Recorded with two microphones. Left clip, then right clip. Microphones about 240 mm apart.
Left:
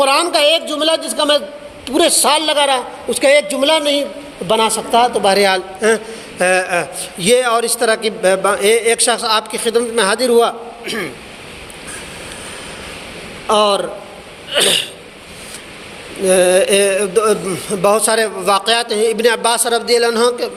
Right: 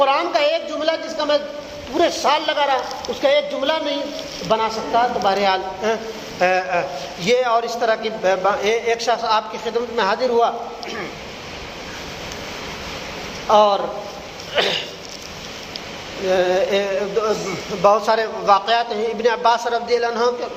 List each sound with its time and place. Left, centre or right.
0.0 s a man's voice: left
13.5 s a man's voice: left
16.3 s a man's voice: left